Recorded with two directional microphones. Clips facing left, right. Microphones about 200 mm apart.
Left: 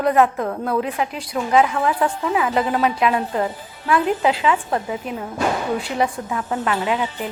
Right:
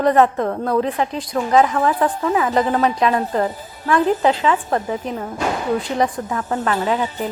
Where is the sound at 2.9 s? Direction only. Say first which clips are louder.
Right 1 dB; 5° left (ahead or behind).